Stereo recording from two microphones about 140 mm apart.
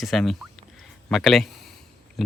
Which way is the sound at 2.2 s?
Centre (ahead or behind).